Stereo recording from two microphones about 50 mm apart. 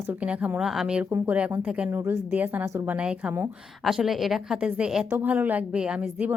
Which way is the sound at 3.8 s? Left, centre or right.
Centre.